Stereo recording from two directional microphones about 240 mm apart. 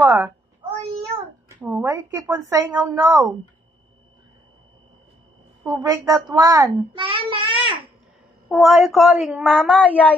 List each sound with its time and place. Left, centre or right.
0.0 s a child's voice: centre
1.1 s a sound: centre
2.5 s a child's voice: centre
5.6 s a child's voice: centre
8.5 s speech: centre